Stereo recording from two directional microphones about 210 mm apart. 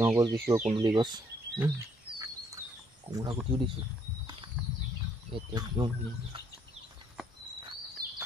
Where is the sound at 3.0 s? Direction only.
20° right (ahead or behind).